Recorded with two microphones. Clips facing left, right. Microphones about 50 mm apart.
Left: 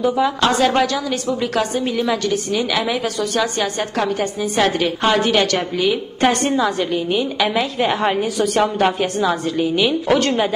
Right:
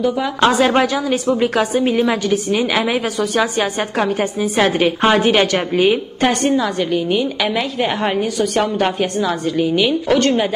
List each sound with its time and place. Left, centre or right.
0.4 s a woman's voice: centre
6.2 s a woman's voice: centre